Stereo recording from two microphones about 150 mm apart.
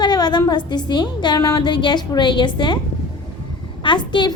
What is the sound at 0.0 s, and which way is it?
A woman's voice, 30° left (ahead or behind).